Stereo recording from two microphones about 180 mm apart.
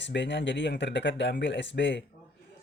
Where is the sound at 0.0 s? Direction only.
80° left.